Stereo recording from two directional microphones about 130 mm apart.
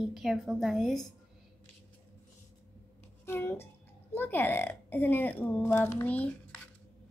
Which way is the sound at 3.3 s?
15° left (ahead or behind).